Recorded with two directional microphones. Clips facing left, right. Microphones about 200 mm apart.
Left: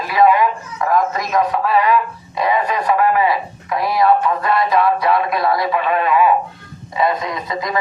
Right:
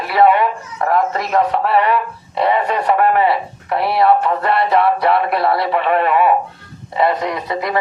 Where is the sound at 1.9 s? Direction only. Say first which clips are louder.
Left 1 dB; 65° right (ahead or behind).